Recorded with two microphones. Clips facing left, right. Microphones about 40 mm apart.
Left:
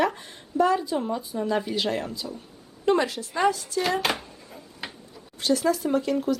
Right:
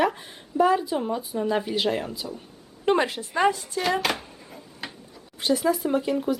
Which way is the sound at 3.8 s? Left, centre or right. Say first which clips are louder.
Right 1 dB; centre.